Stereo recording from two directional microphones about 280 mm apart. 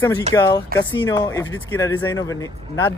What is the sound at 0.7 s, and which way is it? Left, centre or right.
Speech, right.